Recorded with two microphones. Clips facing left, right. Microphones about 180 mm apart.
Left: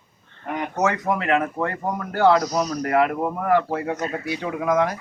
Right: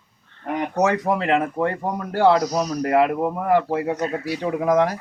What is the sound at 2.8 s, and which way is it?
Speech, 30° right (ahead or behind).